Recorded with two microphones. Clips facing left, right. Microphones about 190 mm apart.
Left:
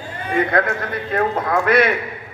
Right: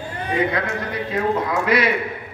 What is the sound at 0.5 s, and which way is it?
A man's voice, 50° left (ahead or behind).